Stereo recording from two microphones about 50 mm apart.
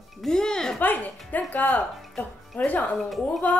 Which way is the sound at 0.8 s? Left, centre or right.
Left.